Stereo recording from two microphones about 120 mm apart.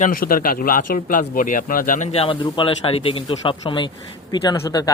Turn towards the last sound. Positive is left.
turn(degrees=35)  # may be behind; listen again after turning